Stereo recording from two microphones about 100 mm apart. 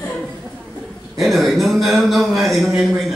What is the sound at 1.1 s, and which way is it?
A man's voice, centre (ahead or behind).